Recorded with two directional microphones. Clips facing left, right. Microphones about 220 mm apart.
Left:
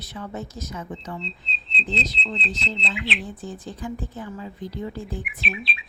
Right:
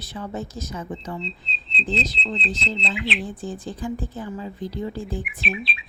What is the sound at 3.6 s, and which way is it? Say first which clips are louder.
A woman's voice: right 2 dB; 30° right (ahead or behind).